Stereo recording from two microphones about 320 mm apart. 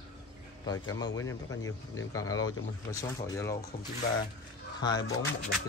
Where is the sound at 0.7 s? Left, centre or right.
Centre.